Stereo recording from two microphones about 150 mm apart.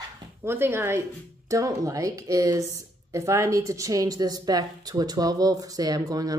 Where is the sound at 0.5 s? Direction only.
15° right (ahead or behind).